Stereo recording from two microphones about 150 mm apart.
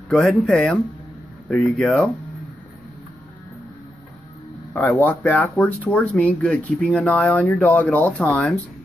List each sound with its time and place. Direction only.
0.1 s speech: 5° left (ahead or behind)
4.8 s speech: 10° left (ahead or behind)